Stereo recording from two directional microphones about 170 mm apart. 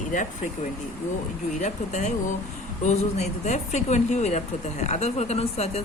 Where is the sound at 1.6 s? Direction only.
45° left (ahead or behind).